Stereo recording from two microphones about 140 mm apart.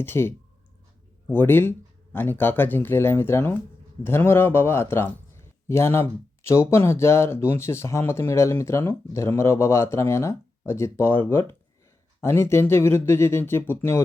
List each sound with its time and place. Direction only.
0.0 s speech: 15° left (ahead or behind)